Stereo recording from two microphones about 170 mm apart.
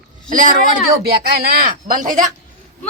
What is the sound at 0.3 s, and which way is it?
Speech, 50° right (ahead or behind).